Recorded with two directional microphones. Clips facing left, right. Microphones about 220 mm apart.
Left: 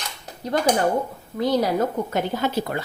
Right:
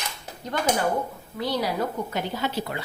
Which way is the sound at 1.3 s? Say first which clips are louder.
Left 6 dB; 45° left (ahead or behind).